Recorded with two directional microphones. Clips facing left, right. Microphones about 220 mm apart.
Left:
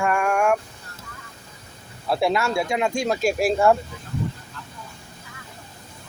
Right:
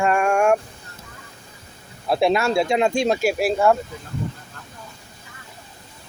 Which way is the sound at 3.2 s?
5° right (ahead or behind).